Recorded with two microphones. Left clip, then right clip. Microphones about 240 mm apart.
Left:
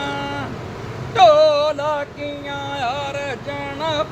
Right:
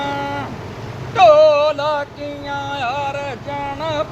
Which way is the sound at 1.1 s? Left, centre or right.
Centre.